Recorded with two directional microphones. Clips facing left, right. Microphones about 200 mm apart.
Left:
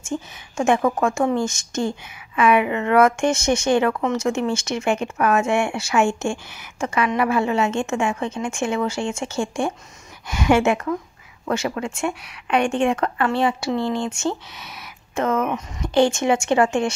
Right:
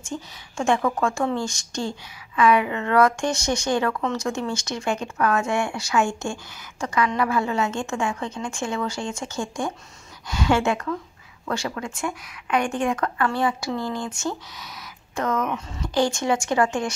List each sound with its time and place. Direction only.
0.1 s a woman's voice: 20° left (ahead or behind)